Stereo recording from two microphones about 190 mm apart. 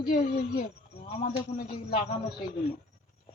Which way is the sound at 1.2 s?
45° left (ahead or behind).